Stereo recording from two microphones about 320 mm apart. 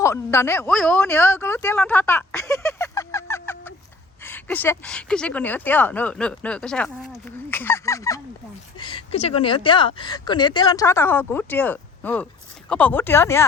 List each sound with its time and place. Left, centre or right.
0.0 s speech: centre